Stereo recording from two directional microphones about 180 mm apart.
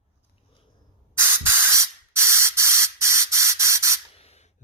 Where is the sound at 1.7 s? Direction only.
15° right (ahead or behind).